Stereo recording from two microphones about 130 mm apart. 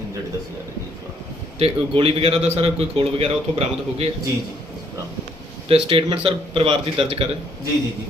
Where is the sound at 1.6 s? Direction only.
45° right (ahead or behind).